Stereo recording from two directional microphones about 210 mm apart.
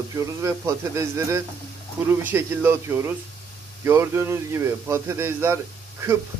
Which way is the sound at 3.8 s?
10° right (ahead or behind).